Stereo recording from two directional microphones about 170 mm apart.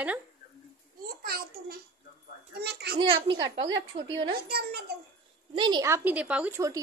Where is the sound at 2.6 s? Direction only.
75° right (ahead or behind).